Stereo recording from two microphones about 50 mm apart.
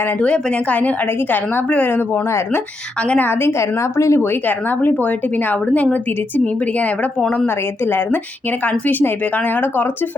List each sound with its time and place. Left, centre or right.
0.2 s a woman's voice: left
1.6 s a woman's voice: left
1.9 s a woman's voice: left
3.6 s a woman's voice: left
4.3 s a woman's voice: left
7.4 s a woman's voice: left